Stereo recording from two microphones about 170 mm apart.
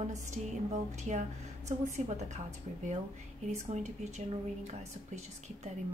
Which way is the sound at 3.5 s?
40° right (ahead or behind).